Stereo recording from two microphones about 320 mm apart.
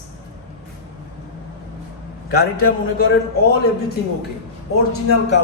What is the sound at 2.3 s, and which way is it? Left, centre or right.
Speech, left.